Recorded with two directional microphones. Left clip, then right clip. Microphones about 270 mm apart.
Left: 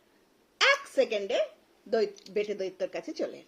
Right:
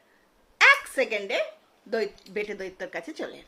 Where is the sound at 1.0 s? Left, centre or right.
Centre.